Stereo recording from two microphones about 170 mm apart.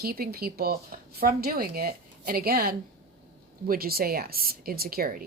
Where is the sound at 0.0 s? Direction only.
65° right (ahead or behind).